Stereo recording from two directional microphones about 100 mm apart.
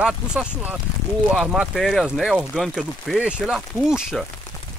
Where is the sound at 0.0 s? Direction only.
10° right (ahead or behind).